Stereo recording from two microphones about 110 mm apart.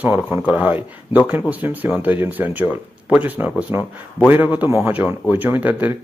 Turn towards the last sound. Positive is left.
turn(degrees=-15)  # may be behind; listen again after turning